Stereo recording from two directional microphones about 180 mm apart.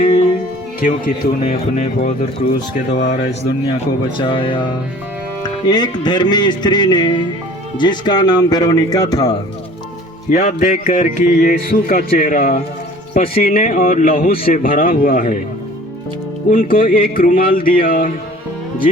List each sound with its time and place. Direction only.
0.8 s speech: 50° left (ahead or behind)
4.2 s speech: 25° left (ahead or behind)
10.2 s speech: 40° left (ahead or behind)
16.5 s speech: 50° left (ahead or behind)